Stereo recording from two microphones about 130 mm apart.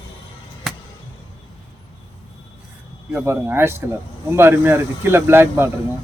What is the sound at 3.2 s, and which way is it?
Speech, 20° right (ahead or behind).